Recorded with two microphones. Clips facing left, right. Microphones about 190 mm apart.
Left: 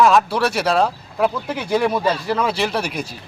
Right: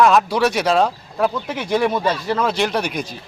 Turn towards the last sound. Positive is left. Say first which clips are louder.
# right 1 dB
turn(degrees=5)  # may be behind; listen again after turning